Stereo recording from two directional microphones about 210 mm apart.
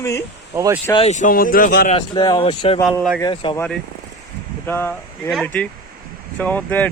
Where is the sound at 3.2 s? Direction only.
20° left (ahead or behind).